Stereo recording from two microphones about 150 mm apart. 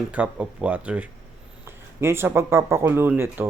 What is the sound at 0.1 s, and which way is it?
Speech, 10° right (ahead or behind).